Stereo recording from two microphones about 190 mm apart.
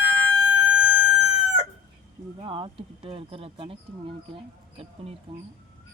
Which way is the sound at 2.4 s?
25° right (ahead or behind).